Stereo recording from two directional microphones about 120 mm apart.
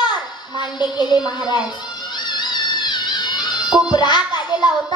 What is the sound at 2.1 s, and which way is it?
Music, 40° left (ahead or behind).